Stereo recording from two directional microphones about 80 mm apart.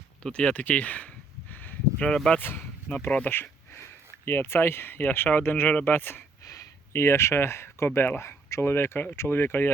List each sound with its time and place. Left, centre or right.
0.2 s a sound: centre
2.0 s speech: centre
2.4 s speech: left
3.2 s a sound: left
4.3 s speech: left
6.4 s speech: left